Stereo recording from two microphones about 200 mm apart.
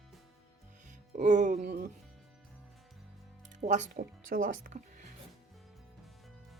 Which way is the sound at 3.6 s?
35° right (ahead or behind).